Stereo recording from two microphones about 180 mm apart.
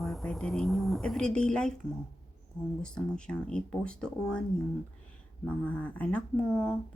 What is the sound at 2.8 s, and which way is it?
Speech, 5° left (ahead or behind).